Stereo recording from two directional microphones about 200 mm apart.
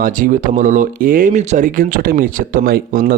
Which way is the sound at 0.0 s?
45° right (ahead or behind).